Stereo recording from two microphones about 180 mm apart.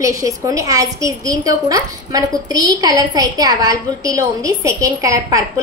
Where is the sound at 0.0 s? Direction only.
20° right (ahead or behind).